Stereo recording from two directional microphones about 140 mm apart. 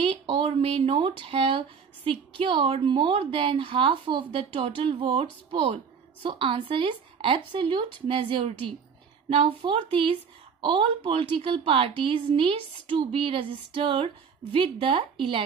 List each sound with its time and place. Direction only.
0.0 s a woman's voice: 45° right (ahead or behind)